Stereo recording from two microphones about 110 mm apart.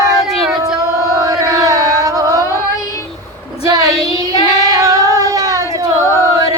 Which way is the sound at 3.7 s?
35° right (ahead or behind).